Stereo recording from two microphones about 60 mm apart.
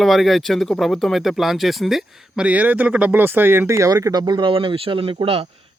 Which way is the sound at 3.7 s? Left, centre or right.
Right.